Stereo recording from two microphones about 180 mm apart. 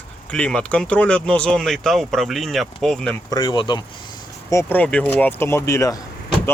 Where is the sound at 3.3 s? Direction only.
25° left (ahead or behind).